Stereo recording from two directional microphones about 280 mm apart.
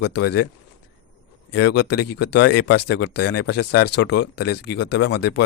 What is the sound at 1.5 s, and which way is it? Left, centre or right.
Speech, left.